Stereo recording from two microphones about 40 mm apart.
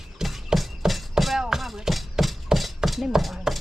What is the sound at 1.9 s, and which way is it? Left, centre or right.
Hammer, centre.